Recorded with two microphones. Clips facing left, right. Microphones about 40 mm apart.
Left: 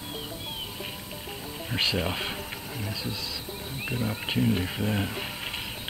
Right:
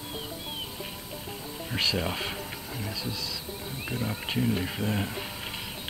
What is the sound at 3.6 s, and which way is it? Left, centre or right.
Speech, centre.